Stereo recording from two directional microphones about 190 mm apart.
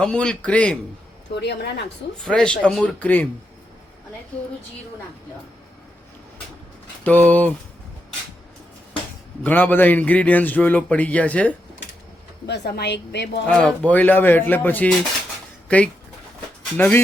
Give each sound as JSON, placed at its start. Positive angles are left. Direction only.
{"t": 0.0, "sound": "speech", "side_deg": 5}
{"t": 1.4, "sound": "a woman's voice", "side_deg": 65}
{"t": 2.2, "sound": "speech", "side_deg": 5}
{"t": 7.0, "sound": "a man's voice", "side_deg": 10}
{"t": 9.4, "sound": "a man's voice", "side_deg": 10}
{"t": 12.5, "sound": "a woman's voice", "side_deg": 60}
{"t": 13.5, "sound": "a man's voice", "side_deg": 5}